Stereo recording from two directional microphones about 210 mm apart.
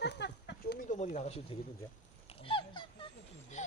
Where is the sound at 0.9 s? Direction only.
35° left (ahead or behind).